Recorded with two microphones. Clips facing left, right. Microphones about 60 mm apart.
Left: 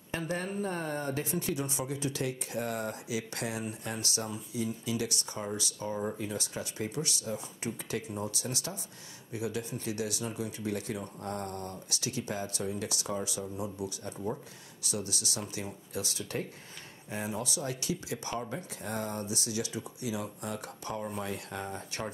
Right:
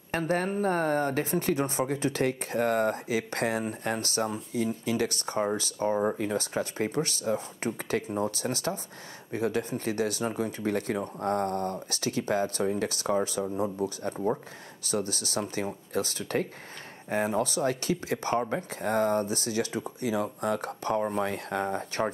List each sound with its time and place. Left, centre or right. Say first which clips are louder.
0.2 s speech: right 7 dB; right